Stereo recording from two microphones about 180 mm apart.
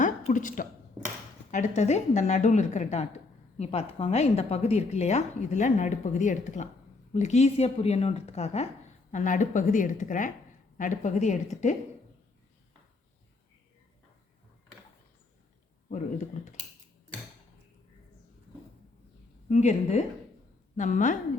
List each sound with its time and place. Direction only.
0.0 s a sound: 45° left (ahead or behind)
1.5 s a woman's voice: 45° left (ahead or behind)
15.9 s speech: 40° left (ahead or behind)
19.5 s a woman's voice: 40° left (ahead or behind)